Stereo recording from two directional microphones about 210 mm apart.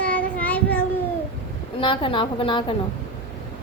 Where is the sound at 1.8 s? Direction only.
25° left (ahead or behind).